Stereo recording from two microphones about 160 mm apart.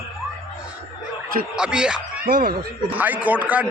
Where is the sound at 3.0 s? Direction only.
10° right (ahead or behind).